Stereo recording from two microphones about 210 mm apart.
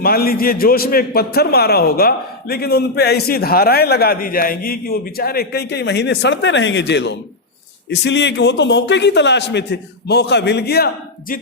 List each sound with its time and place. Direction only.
0.0 s a man's voice: 45° left (ahead or behind)